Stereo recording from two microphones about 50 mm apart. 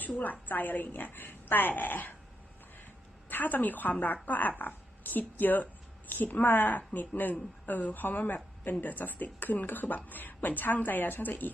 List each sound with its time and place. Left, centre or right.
0.2 s speech: left
3.2 s a woman's voice: left